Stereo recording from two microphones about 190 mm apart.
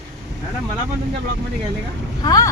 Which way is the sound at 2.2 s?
20° left (ahead or behind).